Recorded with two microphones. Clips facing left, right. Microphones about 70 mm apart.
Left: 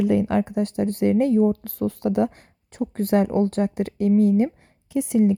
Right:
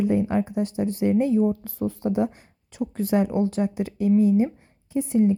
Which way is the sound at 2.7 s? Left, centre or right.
Left.